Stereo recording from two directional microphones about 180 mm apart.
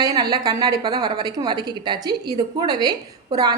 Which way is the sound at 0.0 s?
20° right (ahead or behind).